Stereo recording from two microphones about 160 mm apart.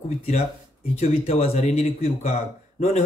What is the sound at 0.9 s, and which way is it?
Speech, 45° left (ahead or behind).